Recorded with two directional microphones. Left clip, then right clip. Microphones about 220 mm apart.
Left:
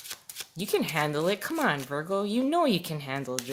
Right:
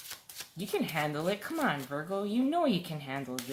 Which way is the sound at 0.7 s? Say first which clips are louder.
Left 5 dB; 50° left (ahead or behind).